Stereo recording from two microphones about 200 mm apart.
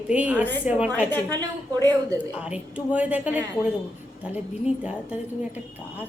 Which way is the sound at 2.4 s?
5° right (ahead or behind).